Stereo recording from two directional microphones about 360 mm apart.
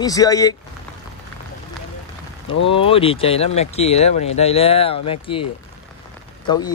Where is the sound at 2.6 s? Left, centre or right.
Centre.